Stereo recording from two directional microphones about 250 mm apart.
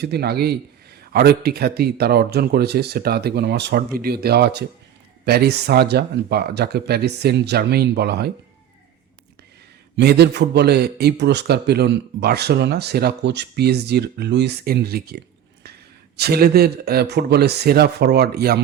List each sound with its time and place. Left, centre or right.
0.0 s a man's voice: right
9.9 s a man's voice: right